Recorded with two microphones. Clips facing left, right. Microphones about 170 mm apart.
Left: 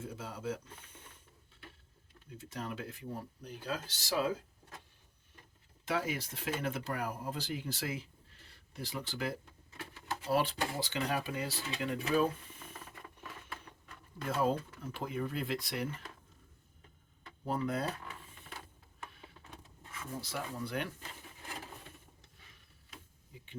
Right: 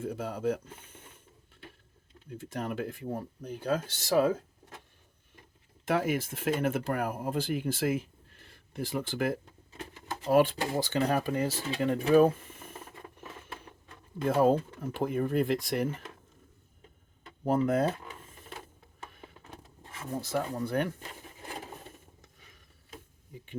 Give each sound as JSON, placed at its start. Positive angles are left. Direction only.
{"t": 0.0, "sound": "speech", "side_deg": -60}
{"t": 2.3, "sound": "speech", "side_deg": -55}
{"t": 5.8, "sound": "speech", "side_deg": -50}
{"t": 12.1, "sound": "a sound", "side_deg": -50}
{"t": 13.5, "sound": "a sound", "side_deg": -25}
{"t": 14.3, "sound": "speech", "side_deg": -55}
{"t": 17.4, "sound": "speech", "side_deg": -50}
{"t": 19.8, "sound": "drawer open or close", "side_deg": -35}
{"t": 20.1, "sound": "speech", "side_deg": -50}